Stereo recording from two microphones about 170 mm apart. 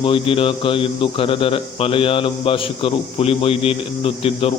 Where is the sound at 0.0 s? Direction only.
30° left (ahead or behind).